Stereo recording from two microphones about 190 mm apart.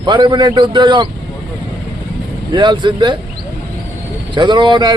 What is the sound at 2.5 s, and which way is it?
Speech, 25° right (ahead or behind).